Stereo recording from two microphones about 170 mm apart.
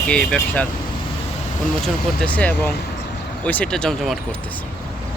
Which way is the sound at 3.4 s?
10° left (ahead or behind).